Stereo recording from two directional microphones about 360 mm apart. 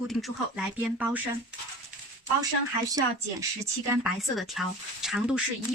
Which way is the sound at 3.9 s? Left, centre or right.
Centre.